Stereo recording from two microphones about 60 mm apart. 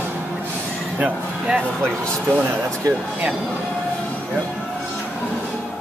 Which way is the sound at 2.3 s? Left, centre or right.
Right.